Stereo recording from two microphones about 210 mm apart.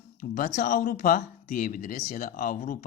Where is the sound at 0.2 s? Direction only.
40° left (ahead or behind).